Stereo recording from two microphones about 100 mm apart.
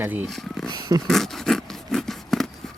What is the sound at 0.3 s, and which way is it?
Speech, 5° left (ahead or behind).